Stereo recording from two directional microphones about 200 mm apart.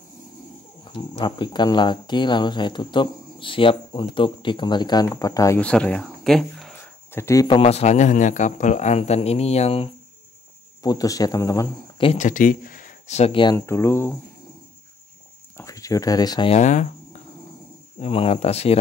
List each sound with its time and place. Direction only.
1.2 s speech: 20° left (ahead or behind); by 6.7 s centre (ahead or behind)
6.7 s speech: 10° left (ahead or behind); by 9.8 s 30° left (ahead or behind)
10.8 s speech: 20° left (ahead or behind)
12.1 s speech: 40° left (ahead or behind)
13.6 s speech: 15° left (ahead or behind)
15.5 s speech: 15° left (ahead or behind)
16.5 s speech: 35° left (ahead or behind)